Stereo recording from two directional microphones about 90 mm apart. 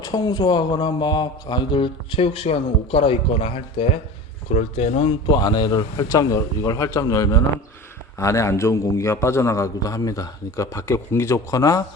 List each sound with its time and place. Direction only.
0.0 s speech: 45° left (ahead or behind); by 3.8 s 90° left
5.0 s a man's voice: 55° left (ahead or behind); by 11.8 s 40° left (ahead or behind)